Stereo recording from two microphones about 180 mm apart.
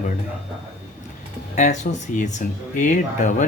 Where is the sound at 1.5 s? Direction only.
40° left (ahead or behind).